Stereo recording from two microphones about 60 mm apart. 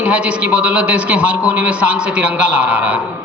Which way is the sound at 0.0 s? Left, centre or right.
Right.